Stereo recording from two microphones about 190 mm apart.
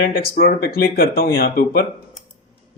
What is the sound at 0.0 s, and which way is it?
Speech, 55° left (ahead or behind).